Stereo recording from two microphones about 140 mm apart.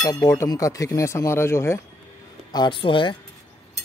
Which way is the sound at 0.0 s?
25° left (ahead or behind).